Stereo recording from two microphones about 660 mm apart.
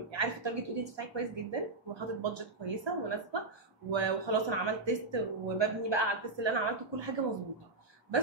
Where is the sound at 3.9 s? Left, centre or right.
Right.